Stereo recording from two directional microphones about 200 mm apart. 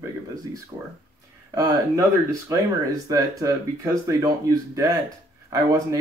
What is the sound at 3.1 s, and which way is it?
Speech, 15° right (ahead or behind).